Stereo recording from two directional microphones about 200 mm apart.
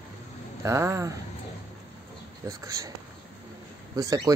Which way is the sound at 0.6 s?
15° right (ahead or behind).